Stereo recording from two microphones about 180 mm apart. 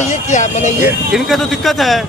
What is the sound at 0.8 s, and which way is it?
Speech, centre (ahead or behind).